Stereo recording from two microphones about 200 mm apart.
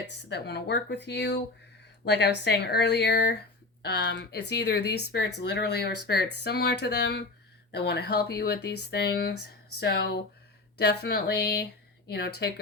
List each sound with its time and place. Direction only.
0.0 s speech: 60° left (ahead or behind)